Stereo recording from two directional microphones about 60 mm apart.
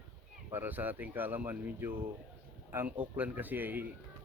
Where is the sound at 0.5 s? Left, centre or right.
Right.